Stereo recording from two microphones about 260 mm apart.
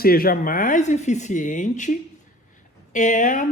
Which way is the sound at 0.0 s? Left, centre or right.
Left.